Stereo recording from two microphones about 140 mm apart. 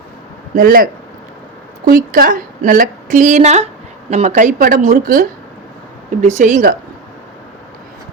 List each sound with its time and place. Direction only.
0.5 s a woman's voice: 90° right
6.2 s speech: 60° right (ahead or behind)